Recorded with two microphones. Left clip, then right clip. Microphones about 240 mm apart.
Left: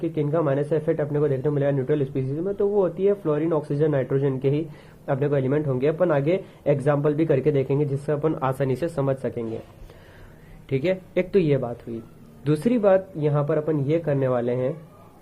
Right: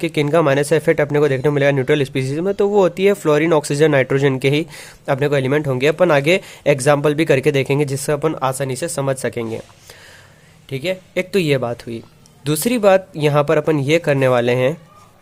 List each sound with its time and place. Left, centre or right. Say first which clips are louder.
0.0 s speech: right 8 dB; right
10.7 s speech: right 1 dB; centre; by 11.9 s right
12.5 s speech: right 5 dB; right